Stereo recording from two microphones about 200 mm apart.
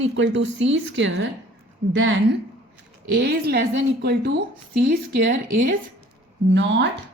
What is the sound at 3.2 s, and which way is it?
Speech, 55° right (ahead or behind).